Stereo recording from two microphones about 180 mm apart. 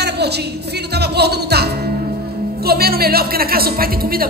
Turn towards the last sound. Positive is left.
turn(degrees=-55)  # may be behind; listen again after turning